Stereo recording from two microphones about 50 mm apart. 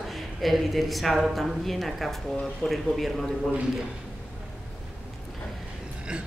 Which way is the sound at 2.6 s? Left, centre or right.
Left.